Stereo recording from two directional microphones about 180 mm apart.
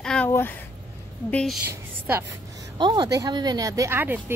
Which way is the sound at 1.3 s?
5° left (ahead or behind).